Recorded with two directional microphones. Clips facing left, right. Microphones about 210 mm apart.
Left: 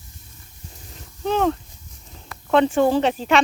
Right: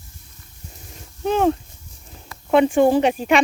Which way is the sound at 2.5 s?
15° right (ahead or behind).